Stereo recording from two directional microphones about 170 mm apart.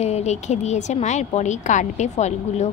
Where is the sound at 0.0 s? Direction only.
40° left (ahead or behind).